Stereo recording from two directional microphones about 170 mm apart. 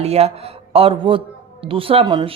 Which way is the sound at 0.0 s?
35° right (ahead or behind).